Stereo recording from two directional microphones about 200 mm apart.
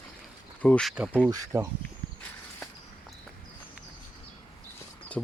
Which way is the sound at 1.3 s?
15° right (ahead or behind).